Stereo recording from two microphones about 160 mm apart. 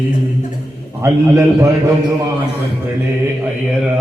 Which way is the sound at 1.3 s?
20° right (ahead or behind).